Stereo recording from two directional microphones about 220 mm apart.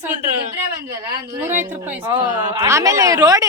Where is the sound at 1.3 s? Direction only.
10° right (ahead or behind).